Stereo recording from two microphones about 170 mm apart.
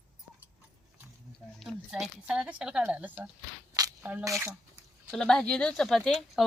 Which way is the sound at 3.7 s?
15° right (ahead or behind).